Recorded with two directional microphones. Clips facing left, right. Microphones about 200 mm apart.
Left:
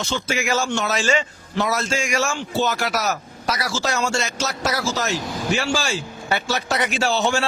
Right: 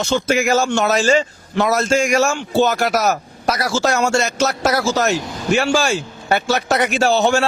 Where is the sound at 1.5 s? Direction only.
50° right (ahead or behind).